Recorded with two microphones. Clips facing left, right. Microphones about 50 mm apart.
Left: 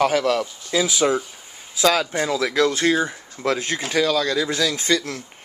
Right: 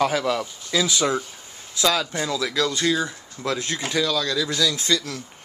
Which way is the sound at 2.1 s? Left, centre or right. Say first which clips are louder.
Left 4 dB; left.